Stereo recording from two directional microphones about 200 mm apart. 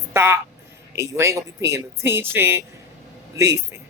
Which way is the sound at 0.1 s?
15° right (ahead or behind).